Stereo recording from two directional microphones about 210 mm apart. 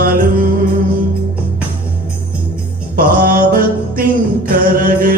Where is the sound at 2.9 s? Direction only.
40° right (ahead or behind).